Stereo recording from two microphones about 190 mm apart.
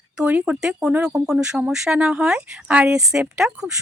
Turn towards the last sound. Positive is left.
turn(degrees=-5)  # may be behind; listen again after turning